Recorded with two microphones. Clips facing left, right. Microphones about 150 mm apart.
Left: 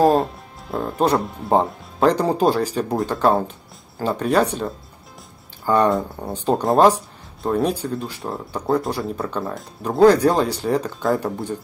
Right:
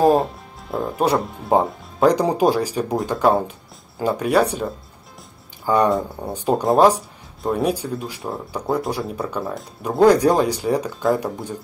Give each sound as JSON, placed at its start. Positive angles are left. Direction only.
{"t": 0.0, "sound": "speech", "side_deg": 0}
{"t": 5.9, "sound": "speech", "side_deg": 0}